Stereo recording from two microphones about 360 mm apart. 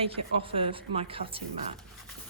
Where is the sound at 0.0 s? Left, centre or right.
Centre.